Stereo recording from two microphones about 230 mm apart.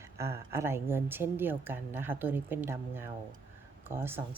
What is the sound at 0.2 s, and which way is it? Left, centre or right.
Speech, centre.